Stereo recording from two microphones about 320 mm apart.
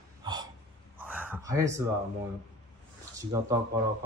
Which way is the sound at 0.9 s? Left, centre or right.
Centre.